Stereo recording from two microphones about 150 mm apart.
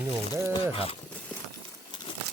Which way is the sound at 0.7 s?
40° left (ahead or behind).